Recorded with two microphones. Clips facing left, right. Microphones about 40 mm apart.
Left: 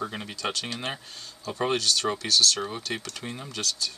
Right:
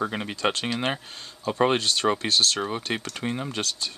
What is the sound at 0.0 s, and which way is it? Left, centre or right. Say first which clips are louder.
Speech: right 6 dB; right.